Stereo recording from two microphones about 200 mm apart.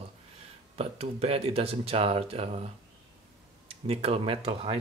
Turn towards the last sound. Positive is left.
turn(degrees=-30)  # may be behind; listen again after turning